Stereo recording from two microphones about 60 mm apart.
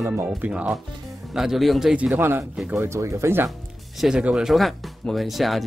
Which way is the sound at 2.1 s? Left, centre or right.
Right.